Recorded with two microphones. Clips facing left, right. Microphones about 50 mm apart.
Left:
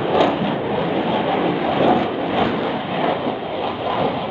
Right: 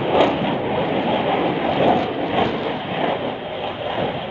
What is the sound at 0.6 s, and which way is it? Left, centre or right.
Vehicle, centre.